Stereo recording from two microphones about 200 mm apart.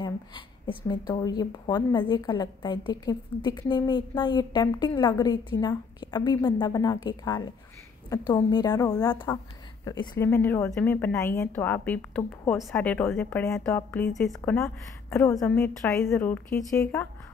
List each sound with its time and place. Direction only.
0.0 s speech: 20° left (ahead or behind)